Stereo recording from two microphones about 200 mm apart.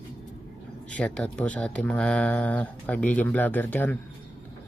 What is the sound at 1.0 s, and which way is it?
Speech, 5° left (ahead or behind).